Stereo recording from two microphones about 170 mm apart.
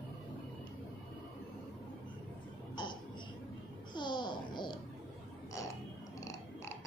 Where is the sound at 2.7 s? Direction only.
25° left (ahead or behind).